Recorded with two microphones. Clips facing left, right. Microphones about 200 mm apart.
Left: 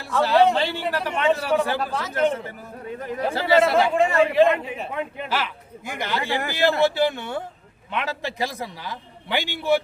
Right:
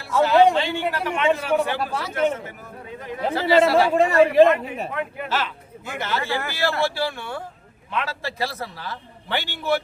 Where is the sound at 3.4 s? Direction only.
25° right (ahead or behind).